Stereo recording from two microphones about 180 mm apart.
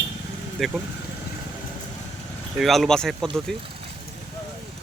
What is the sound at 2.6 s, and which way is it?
Speech, centre (ahead or behind).